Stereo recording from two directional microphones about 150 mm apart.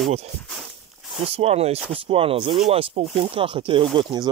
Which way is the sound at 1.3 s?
45° right (ahead or behind).